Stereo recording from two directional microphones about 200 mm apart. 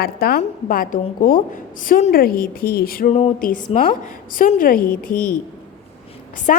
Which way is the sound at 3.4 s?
45° left (ahead or behind).